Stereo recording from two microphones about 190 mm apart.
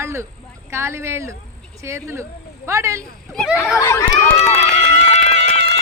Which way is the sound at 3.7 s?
15° left (ahead or behind).